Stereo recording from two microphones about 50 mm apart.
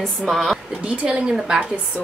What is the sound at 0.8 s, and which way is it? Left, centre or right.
Speech, right.